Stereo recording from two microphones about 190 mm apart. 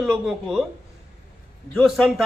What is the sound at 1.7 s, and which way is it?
Speech, centre (ahead or behind).